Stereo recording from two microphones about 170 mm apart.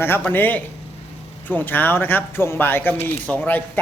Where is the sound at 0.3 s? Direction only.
10° left (ahead or behind).